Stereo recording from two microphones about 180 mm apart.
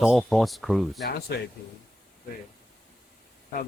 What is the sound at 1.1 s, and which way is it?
Speech, 65° left (ahead or behind).